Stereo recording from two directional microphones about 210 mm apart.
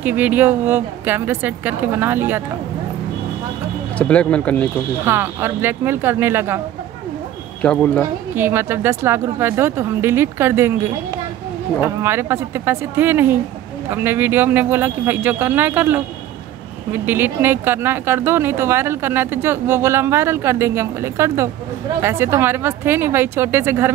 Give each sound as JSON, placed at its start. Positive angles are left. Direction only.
{"t": 0.0, "sound": "speech", "side_deg": -10}
{"t": 4.0, "sound": "speech", "side_deg": 5}
{"t": 5.0, "sound": "speech", "side_deg": -10}
{"t": 7.6, "sound": "speech", "side_deg": 5}
{"t": 8.4, "sound": "speech", "side_deg": -10}
{"t": 17.0, "sound": "speech", "side_deg": -10}